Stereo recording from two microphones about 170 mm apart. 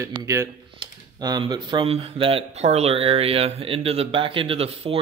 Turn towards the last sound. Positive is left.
turn(degrees=-35)  # may be behind; listen again after turning